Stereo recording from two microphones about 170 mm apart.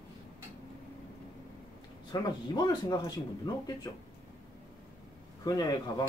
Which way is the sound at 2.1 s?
25° left (ahead or behind).